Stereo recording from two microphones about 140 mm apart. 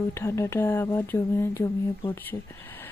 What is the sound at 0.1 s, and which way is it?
Speech, 20° left (ahead or behind).